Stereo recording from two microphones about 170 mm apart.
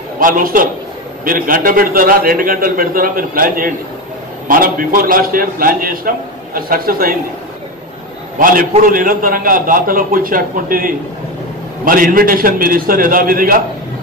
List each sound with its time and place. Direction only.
0.2 s a man's voice: 55° right (ahead or behind)
8.4 s a man's voice: 55° right (ahead or behind)